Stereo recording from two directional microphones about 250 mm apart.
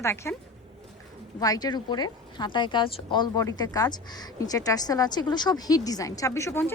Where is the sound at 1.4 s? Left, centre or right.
Centre.